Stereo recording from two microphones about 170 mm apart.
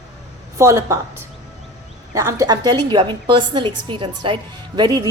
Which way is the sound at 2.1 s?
20° right (ahead or behind).